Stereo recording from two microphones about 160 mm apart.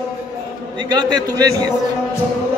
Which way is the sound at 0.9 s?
25° right (ahead or behind).